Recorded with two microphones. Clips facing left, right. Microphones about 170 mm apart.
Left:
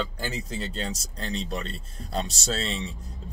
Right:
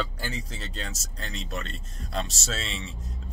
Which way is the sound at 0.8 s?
35° left (ahead or behind).